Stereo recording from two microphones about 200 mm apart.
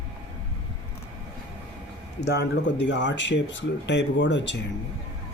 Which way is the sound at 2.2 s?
60° left (ahead or behind).